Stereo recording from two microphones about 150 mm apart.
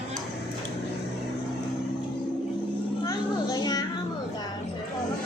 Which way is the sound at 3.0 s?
25° left (ahead or behind).